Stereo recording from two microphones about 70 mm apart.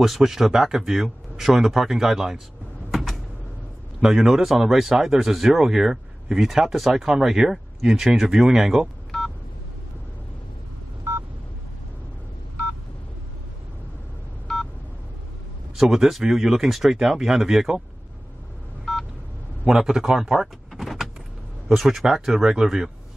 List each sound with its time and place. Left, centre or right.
0.0 s speech: centre
2.9 s a sound: centre
4.0 s speech: centre
9.1 s telephone dialing: centre
11.1 s telephone dialing: right
14.5 s telephone dialing: centre
15.7 s speech: centre
18.9 s telephone dialing: centre
19.8 s speech: centre